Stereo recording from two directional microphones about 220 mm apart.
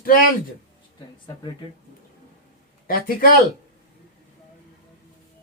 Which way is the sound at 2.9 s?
40° left (ahead or behind).